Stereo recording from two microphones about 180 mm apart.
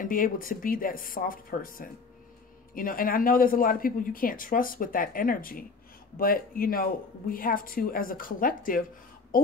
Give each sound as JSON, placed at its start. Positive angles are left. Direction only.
{"t": 0.0, "sound": "speech", "side_deg": 50}